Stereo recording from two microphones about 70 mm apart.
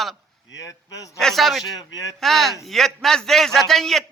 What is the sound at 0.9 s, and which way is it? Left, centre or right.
Speech, left.